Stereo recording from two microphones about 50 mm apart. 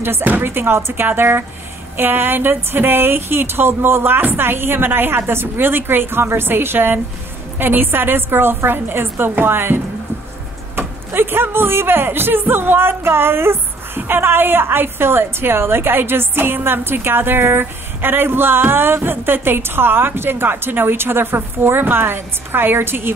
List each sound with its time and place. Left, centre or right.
0.2 s speech: right
0.5 s speech: right
10.8 s speech: right